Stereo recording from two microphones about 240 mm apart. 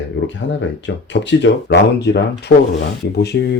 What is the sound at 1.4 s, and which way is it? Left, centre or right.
Speech, left.